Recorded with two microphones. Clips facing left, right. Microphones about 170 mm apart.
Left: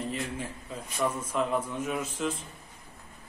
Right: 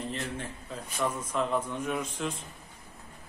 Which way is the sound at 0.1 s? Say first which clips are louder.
Left 1 dB; 5° left (ahead or behind).